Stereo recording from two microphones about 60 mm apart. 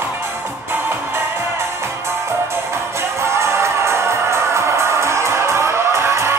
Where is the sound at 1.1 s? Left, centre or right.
Right.